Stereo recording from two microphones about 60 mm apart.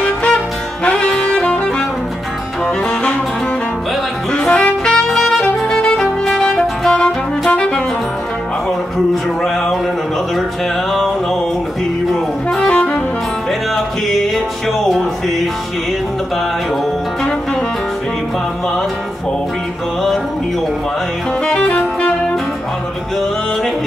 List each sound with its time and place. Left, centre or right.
0.0 s music: centre
0.8 s saxophone: centre
2.6 s music: centre
4.5 s saxophone: left
5.0 s saxophone: centre
5.6 s music: centre
7.4 s saxophone: centre
9.1 s music: centre
12.1 s saxophone: centre
14.0 s music: centre
21.5 s music: centre